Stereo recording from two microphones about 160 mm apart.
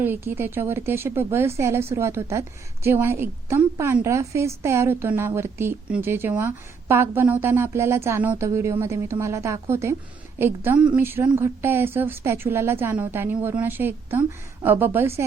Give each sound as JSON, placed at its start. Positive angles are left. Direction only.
{"t": 0.0, "sound": "a woman's voice", "side_deg": -15}